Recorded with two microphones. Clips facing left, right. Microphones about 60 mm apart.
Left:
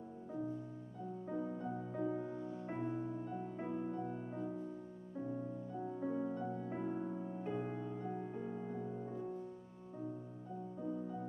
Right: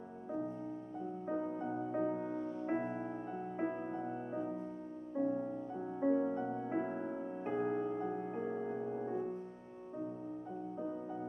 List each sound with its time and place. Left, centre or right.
1.6 s music: right
2.0 s music: right
2.6 s music: right
3.3 s music: right